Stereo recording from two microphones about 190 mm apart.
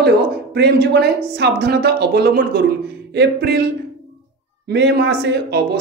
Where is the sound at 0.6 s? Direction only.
60° right (ahead or behind).